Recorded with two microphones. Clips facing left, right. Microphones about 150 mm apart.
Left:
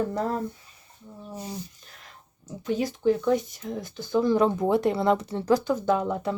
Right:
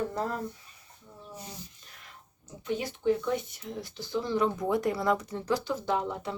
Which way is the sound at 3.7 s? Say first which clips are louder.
Left 6 dB; 50° left (ahead or behind).